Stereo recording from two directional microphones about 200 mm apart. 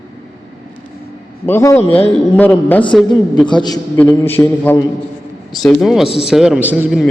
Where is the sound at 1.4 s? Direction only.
15° left (ahead or behind).